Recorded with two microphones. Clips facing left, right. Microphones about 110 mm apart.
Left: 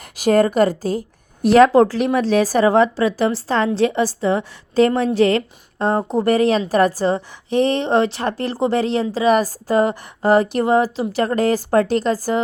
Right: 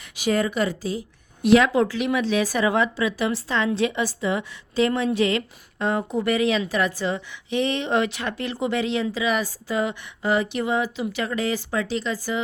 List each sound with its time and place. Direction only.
0.2 s a woman's voice: 45° left (ahead or behind)